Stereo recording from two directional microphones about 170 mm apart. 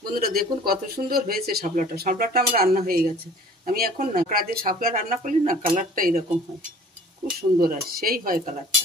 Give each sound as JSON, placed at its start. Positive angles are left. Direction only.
{"t": 0.0, "sound": "speech", "side_deg": -60}
{"t": 7.3, "sound": "speech", "side_deg": -60}